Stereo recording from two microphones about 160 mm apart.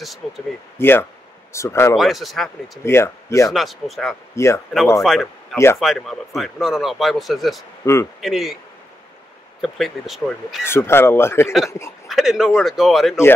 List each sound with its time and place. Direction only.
0.2 s speech: centre (ahead or behind)
0.7 s speech: 15° left (ahead or behind)
2.0 s speech: centre (ahead or behind)
2.8 s speech: 15° left (ahead or behind)
3.5 s speech: centre (ahead or behind)
7.8 s speech: 15° left (ahead or behind)
8.2 s speech: centre (ahead or behind)
9.6 s speech: centre (ahead or behind)
10.6 s speech: 15° left (ahead or behind)
11.4 s speech: centre (ahead or behind)